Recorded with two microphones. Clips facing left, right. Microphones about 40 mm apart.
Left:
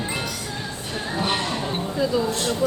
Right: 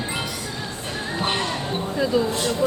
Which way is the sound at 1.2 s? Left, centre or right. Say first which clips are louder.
Even; right.